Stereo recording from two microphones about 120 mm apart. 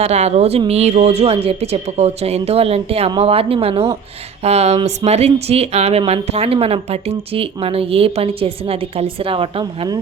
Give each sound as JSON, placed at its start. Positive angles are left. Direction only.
{"t": 0.0, "sound": "speech", "side_deg": -65}